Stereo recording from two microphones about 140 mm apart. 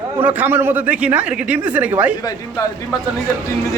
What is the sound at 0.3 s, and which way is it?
Speech, 15° right (ahead or behind).